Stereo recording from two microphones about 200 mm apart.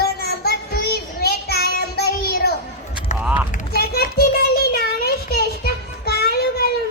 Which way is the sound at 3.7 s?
50° left (ahead or behind).